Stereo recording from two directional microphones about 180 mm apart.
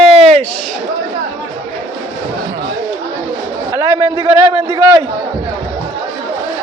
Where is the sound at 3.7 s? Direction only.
20° right (ahead or behind).